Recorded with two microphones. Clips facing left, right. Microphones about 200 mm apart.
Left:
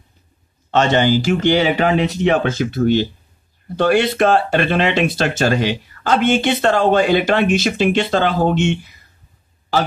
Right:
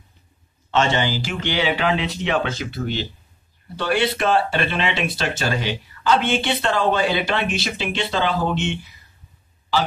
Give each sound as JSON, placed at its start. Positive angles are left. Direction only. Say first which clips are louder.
{"t": 0.7, "sound": "speech", "louder": "left 6 dB", "side_deg": 50}